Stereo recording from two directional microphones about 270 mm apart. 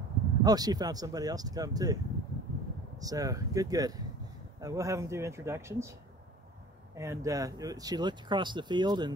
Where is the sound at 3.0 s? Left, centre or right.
Centre.